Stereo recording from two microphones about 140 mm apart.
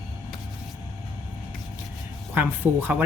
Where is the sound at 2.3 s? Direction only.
15° right (ahead or behind).